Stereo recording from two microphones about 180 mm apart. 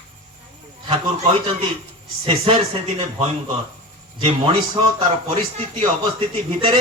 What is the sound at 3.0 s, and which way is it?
Speech, 30° right (ahead or behind).